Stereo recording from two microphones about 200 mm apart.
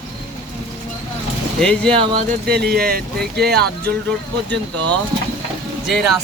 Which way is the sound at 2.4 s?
50° right (ahead or behind).